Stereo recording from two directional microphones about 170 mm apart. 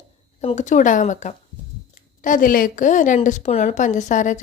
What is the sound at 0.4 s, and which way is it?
Speech, 45° left (ahead or behind).